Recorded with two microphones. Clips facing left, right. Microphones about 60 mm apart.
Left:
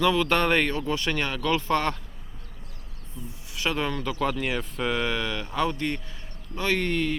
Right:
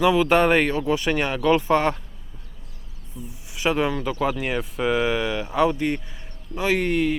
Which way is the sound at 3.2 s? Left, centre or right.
Centre.